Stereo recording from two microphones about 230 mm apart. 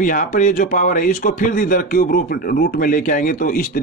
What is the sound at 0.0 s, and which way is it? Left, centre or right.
Speech, left.